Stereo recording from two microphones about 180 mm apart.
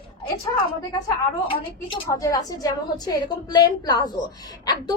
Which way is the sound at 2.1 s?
20° left (ahead or behind).